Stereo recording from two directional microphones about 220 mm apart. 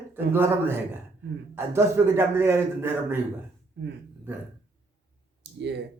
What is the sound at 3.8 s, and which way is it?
Speech, 50° right (ahead or behind).